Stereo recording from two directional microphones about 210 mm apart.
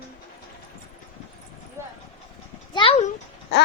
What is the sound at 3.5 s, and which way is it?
Babbling, 55° left (ahead or behind).